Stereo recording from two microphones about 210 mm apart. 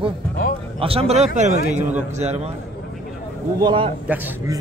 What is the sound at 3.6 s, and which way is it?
Speech, 25° right (ahead or behind).